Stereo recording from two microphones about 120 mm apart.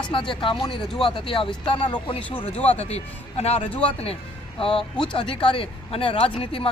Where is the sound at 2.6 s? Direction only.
60° left (ahead or behind).